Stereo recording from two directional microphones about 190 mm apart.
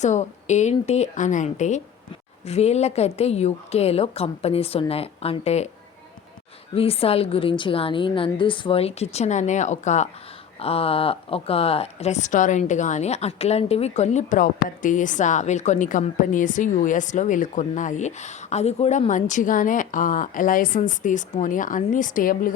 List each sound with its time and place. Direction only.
0.0 s speech: 40° left (ahead or behind)
6.7 s speech: 30° left (ahead or behind); by 22.5 s 45° left (ahead or behind)